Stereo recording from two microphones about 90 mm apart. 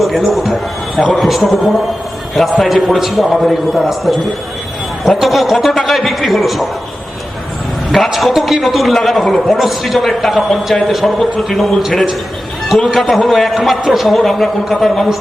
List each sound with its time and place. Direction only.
0.0 s a man's voice: centre (ahead or behind)
7.9 s a man's voice: centre (ahead or behind)